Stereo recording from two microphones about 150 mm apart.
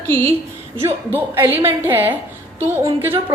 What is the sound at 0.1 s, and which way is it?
Speech, 20° left (ahead or behind).